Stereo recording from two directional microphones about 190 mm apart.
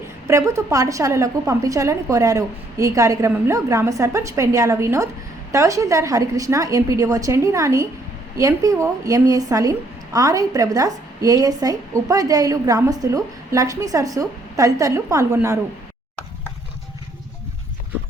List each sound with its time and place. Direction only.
0.3 s a woman's voice: 15° right (ahead or behind)